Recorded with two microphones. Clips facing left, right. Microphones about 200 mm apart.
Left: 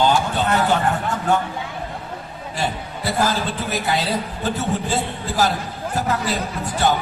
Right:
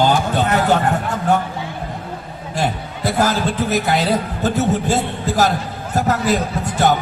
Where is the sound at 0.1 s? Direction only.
45° right (ahead or behind).